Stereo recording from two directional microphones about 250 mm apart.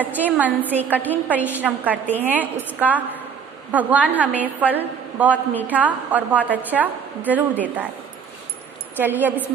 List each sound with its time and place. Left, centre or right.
0.2 s a woman's voice: centre
8.9 s a woman's voice: centre